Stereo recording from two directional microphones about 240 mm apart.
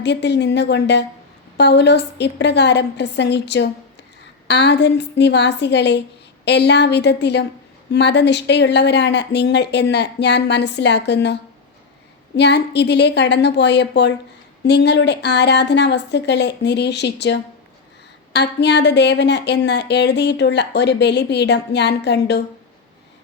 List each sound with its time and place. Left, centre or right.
0.0 s a woman's voice: left
12.4 s a woman's voice: left